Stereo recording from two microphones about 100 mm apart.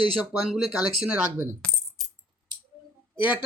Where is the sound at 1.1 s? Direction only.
15° right (ahead or behind).